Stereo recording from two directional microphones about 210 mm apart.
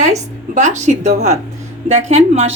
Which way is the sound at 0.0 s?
35° right (ahead or behind).